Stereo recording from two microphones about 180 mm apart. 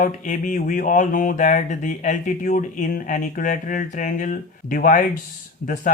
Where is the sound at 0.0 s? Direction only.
45° left (ahead or behind).